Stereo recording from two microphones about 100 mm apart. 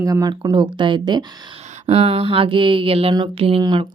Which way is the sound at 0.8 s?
50° right (ahead or behind).